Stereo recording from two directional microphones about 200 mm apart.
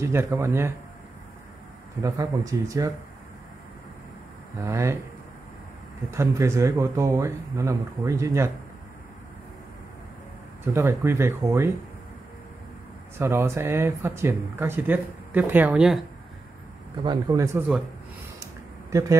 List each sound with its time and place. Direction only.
0.0 s speech: 15° right (ahead or behind)
2.0 s speech: 15° right (ahead or behind)
4.6 s speech: 15° right (ahead or behind)
6.0 s speech: 15° right (ahead or behind)
10.6 s speech: 15° right (ahead or behind)
13.2 s speech: 15° right (ahead or behind)
17.0 s speech: 20° right (ahead or behind)
18.4 s a sound: 15° right (ahead or behind)